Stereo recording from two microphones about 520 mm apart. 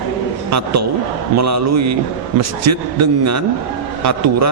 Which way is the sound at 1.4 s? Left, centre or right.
Right.